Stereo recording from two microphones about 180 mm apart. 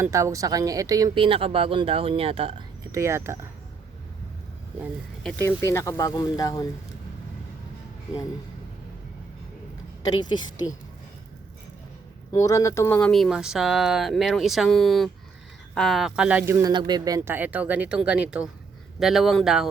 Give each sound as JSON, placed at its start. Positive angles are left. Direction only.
{"t": 0.0, "sound": "speech", "side_deg": -15}
{"t": 2.9, "sound": "speech", "side_deg": -15}
{"t": 5.2, "sound": "speech", "side_deg": 10}
{"t": 10.1, "sound": "speech", "side_deg": 25}
{"t": 12.3, "sound": "speech", "side_deg": 20}
{"t": 13.0, "sound": "speech", "side_deg": 5}
{"t": 16.6, "sound": "speech", "side_deg": -25}